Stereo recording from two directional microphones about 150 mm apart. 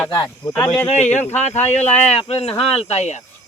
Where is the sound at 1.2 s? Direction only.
50° left (ahead or behind).